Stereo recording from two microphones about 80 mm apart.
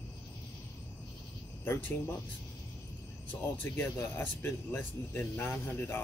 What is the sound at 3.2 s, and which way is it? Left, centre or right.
Speech, left.